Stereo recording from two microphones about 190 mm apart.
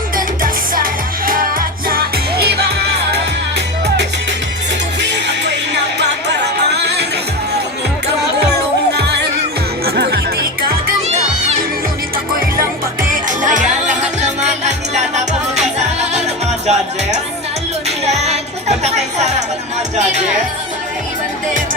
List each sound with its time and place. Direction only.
0.2 s music: 50° right (ahead or behind)
4.9 s music: 65° right (ahead or behind)
9.8 s music: 55° right (ahead or behind)
12.5 s music: 45° right (ahead or behind)